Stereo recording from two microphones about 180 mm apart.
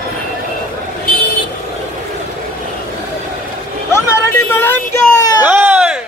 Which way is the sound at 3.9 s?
15° left (ahead or behind).